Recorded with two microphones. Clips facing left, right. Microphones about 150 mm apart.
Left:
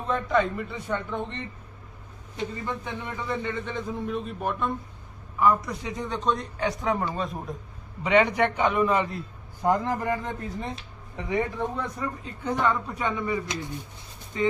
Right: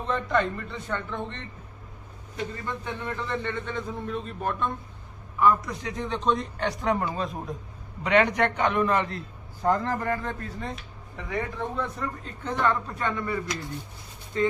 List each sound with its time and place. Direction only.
0.1 s speech: 5° left (ahead or behind)
2.6 s a man's voice: 10° left (ahead or behind)